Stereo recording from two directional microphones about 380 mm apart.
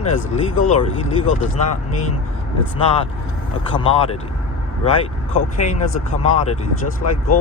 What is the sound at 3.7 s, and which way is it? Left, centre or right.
Speech, centre.